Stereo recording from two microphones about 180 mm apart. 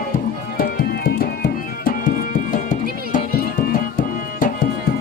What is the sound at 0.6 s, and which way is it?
Music, 55° left (ahead or behind).